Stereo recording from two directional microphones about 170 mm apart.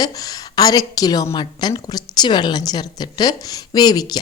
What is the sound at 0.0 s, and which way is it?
A woman's voice, 20° left (ahead or behind).